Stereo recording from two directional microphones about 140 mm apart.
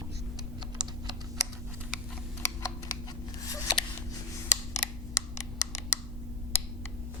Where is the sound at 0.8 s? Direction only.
30° right (ahead or behind).